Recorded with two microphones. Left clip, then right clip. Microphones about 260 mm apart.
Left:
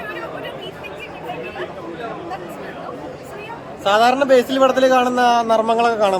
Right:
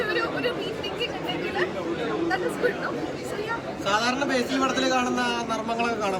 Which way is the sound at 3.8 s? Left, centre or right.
Centre.